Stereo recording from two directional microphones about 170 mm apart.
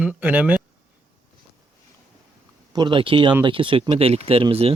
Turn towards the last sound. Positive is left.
turn(degrees=-35)  # may be behind; listen again after turning